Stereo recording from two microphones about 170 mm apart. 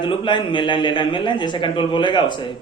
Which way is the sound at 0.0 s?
30° left (ahead or behind).